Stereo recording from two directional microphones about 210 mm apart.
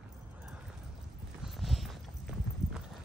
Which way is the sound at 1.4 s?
Centre (ahead or behind).